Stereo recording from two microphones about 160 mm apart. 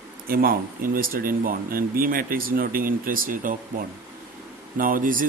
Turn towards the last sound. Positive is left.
turn(degrees=-60)  # may be behind; listen again after turning